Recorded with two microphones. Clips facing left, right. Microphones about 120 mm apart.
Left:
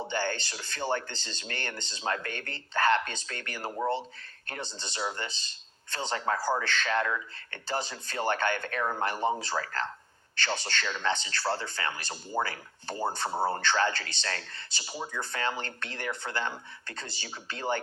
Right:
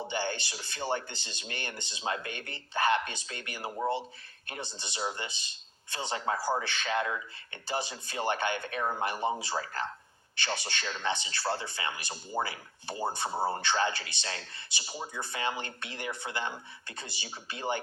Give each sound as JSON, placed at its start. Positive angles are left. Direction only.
{"t": 0.1, "sound": "speech", "side_deg": -15}